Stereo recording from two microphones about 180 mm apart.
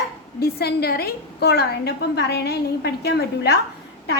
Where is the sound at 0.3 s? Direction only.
60° left (ahead or behind).